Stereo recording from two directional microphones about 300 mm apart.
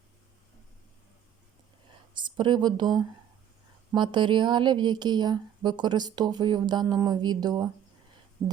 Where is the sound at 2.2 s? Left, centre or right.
Centre.